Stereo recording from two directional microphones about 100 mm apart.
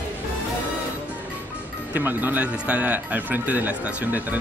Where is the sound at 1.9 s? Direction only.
20° right (ahead or behind).